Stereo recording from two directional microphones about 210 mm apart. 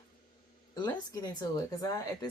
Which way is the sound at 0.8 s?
20° left (ahead or behind).